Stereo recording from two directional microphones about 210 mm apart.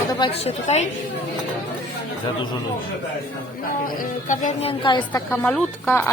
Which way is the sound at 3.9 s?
35° left (ahead or behind).